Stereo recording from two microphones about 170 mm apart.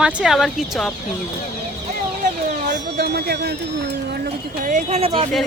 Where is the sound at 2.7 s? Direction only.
70° right (ahead or behind).